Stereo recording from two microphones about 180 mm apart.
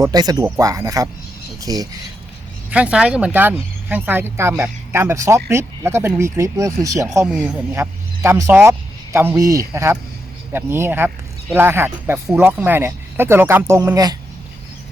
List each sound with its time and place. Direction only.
0.0 s speech: 20° right (ahead or behind)
2.6 s speech: 5° right (ahead or behind)
7.3 s speech: 5° right (ahead or behind)